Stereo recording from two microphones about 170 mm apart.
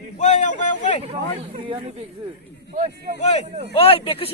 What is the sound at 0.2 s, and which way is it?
Speech, 45° left (ahead or behind).